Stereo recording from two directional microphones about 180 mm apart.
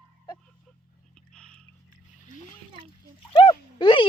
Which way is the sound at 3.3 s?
25° left (ahead or behind).